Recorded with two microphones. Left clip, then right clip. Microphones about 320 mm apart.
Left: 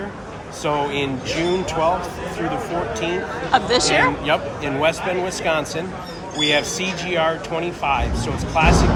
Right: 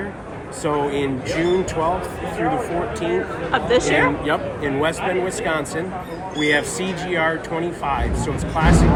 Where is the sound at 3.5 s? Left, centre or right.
Centre.